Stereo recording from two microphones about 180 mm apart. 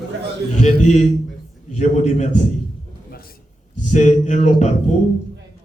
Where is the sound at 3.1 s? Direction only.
55° left (ahead or behind).